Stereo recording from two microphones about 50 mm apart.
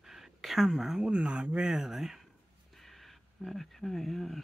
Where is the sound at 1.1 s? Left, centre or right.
Right.